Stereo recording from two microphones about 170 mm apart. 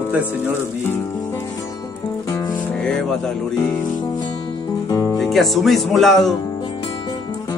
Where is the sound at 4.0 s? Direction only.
25° left (ahead or behind).